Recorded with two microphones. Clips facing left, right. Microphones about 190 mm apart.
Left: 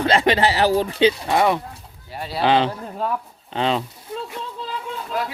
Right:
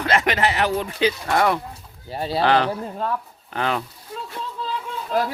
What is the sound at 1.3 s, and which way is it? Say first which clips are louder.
Speech: left 1 dB; 15° left (ahead or behind).